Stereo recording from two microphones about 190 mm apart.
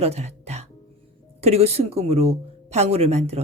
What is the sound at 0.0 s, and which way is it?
Music, 35° right (ahead or behind).